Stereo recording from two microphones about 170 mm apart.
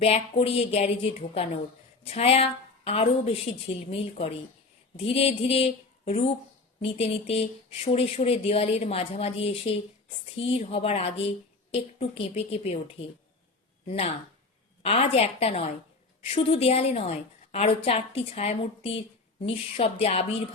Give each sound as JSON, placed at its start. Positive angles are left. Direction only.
{"t": 0.0, "sound": "speech", "side_deg": 35}
{"t": 13.8, "sound": "speech", "side_deg": 35}